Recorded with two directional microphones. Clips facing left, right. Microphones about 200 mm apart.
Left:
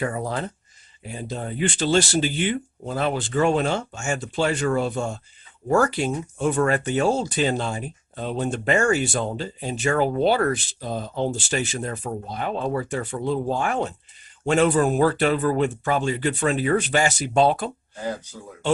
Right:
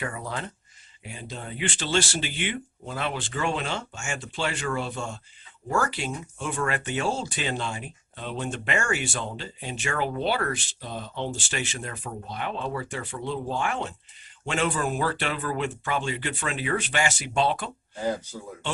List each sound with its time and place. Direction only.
0.0 s speech: 40° left (ahead or behind)